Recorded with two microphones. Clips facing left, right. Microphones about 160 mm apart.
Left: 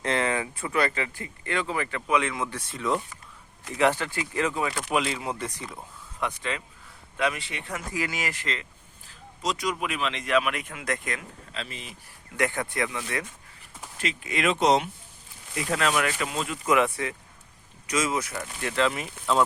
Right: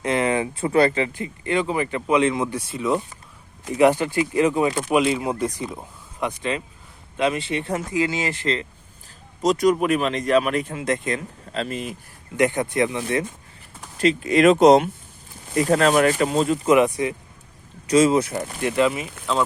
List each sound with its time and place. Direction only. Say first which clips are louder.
0.0 s speech: right 5 dB; 15° right (ahead or behind)
4.9 s speech: right 7 dB; 10° right (ahead or behind); by 8.6 s 30° right (ahead or behind)
9.4 s speech: right 11 dB; 45° right (ahead or behind); by 11.2 s 25° right (ahead or behind)
11.5 s speech: right 12 dB; 45° right (ahead or behind)
12.4 s speech: right 7 dB; 20° right (ahead or behind)
14.0 s speech: right 12 dB; 35° right (ahead or behind)
16.6 s speech: right 4 dB; 20° right (ahead or behind)
17.8 s speech: right 11 dB; 30° right (ahead or behind)
18.6 s speech: right 5 dB; 10° right (ahead or behind)